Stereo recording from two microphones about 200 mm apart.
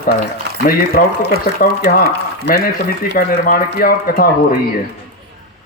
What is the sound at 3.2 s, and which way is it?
A man's voice, 45° left (ahead or behind).